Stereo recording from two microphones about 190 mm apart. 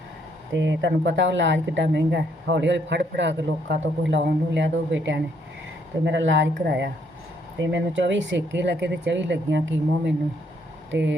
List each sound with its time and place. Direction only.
0.5 s speech: 70° right (ahead or behind)